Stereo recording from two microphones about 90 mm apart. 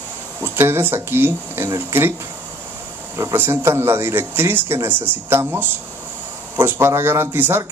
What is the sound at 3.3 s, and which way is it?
Speech, 25° right (ahead or behind).